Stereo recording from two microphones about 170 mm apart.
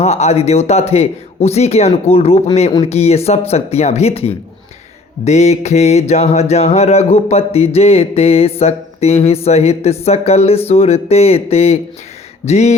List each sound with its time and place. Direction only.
0.0 s music: 40° left (ahead or behind)